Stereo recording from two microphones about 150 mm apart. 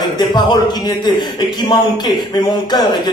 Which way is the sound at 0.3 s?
30° left (ahead or behind).